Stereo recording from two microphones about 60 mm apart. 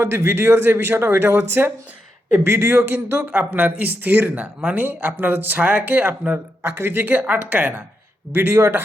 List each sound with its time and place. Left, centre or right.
0.0 s speech: right
6.6 s speech: right
8.3 s speech: right